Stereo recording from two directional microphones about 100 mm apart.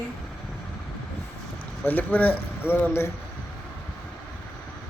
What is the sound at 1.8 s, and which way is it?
A man's voice, 15° left (ahead or behind).